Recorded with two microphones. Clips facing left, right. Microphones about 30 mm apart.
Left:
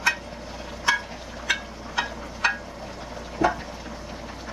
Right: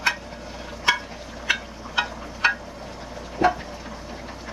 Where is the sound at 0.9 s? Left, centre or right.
Right.